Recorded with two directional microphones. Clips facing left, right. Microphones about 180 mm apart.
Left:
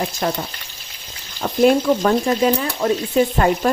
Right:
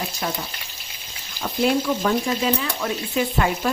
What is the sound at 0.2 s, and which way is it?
Speech, 45° left (ahead or behind).